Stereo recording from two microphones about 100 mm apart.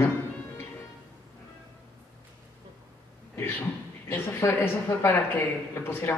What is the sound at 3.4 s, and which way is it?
A man's voice, 20° left (ahead or behind).